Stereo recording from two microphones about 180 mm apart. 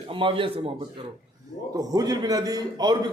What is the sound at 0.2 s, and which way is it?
Speech, 30° right (ahead or behind).